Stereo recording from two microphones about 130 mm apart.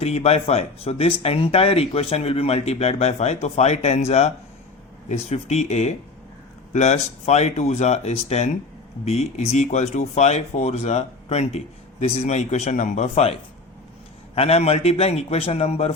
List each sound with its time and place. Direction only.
0.0 s speech: 55° left (ahead or behind)
14.3 s speech: 50° left (ahead or behind)